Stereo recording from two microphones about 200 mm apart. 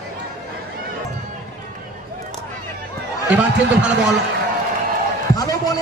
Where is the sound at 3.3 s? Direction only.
5° right (ahead or behind).